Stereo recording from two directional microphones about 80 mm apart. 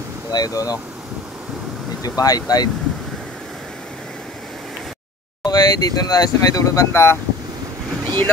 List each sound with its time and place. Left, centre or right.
0.3 s speech: left
2.0 s speech: left
5.4 s speech: left
8.0 s boat: right